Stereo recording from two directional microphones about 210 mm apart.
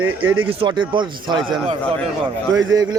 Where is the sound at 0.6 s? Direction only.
20° right (ahead or behind).